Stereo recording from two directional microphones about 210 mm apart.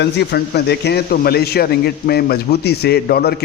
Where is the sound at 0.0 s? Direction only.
50° left (ahead or behind).